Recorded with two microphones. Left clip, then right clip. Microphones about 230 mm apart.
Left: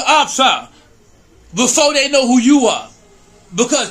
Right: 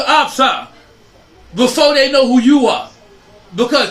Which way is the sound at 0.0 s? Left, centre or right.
Centre.